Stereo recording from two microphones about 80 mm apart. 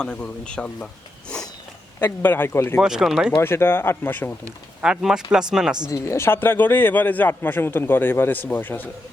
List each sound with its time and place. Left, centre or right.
0.0 s speech: centre
2.0 s a man's voice: left
2.7 s speech: centre
3.3 s a man's voice: left
4.8 s speech: centre
5.9 s a man's voice: left